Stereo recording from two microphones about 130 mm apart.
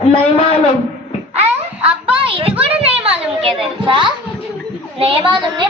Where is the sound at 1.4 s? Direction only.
45° right (ahead or behind).